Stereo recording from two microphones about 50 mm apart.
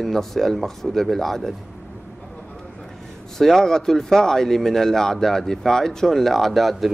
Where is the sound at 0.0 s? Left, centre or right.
Centre.